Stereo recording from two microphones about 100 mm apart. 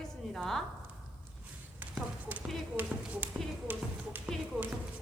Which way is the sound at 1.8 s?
15° right (ahead or behind).